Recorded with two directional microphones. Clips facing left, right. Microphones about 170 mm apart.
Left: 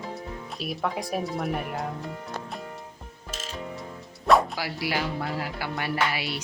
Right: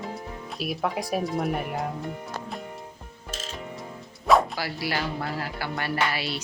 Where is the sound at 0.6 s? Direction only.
5° right (ahead or behind).